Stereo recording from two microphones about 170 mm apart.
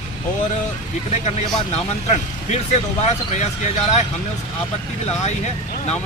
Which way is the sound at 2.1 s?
40° left (ahead or behind).